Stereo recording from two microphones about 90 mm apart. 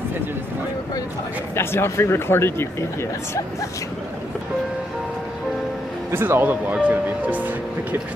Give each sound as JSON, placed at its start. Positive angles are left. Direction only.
{"t": 1.5, "sound": "speech", "side_deg": 30}
{"t": 6.1, "sound": "speech", "side_deg": -25}